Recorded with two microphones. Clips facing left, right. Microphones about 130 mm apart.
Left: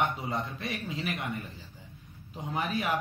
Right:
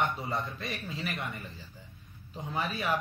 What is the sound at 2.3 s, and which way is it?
Speech, 15° left (ahead or behind).